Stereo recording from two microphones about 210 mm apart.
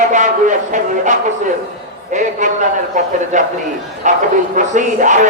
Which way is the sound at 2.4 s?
35° right (ahead or behind).